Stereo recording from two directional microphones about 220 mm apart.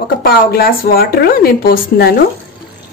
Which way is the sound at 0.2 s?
45° left (ahead or behind).